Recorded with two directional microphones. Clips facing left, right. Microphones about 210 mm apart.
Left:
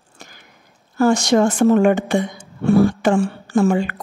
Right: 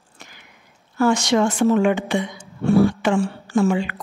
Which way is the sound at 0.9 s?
40° left (ahead or behind).